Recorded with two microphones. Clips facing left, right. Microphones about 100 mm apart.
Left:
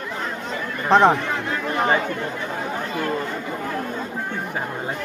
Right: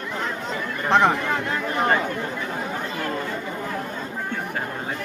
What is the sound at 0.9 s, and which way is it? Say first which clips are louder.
Speech: left 3 dB; 15° left (ahead or behind).